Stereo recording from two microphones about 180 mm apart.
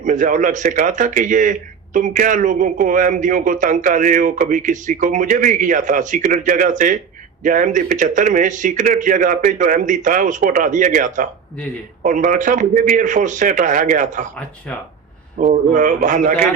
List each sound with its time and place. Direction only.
0.0 s speech: 45° right (ahead or behind)
15.4 s speech: 45° right (ahead or behind)